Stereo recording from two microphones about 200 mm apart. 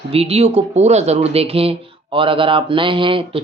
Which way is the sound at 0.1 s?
30° right (ahead or behind).